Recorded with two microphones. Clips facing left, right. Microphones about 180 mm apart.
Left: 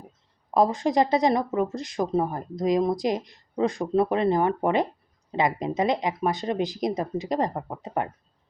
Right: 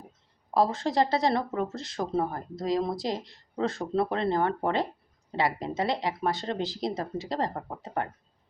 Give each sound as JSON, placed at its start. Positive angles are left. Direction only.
{"t": 0.5, "sound": "speech", "side_deg": 15}